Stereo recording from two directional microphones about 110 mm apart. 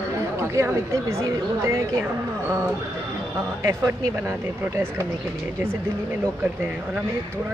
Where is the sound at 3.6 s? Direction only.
25° right (ahead or behind).